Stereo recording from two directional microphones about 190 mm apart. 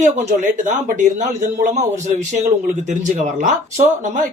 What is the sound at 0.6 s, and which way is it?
Speech, 40° right (ahead or behind).